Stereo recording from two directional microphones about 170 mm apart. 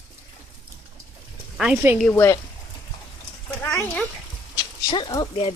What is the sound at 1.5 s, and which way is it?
Speech, 5° right (ahead or behind).